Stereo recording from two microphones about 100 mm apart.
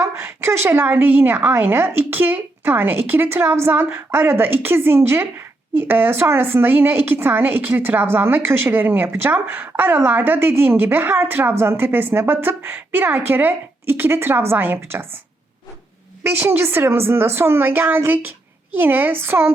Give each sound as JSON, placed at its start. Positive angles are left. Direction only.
{"t": 0.0, "sound": "speech", "side_deg": -25}
{"t": 16.2, "sound": "speech", "side_deg": -20}